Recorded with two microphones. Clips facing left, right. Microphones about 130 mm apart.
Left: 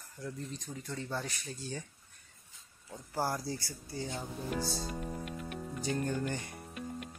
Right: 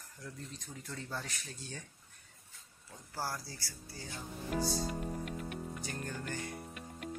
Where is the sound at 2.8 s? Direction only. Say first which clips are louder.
Left 6 dB; 20° left (ahead or behind).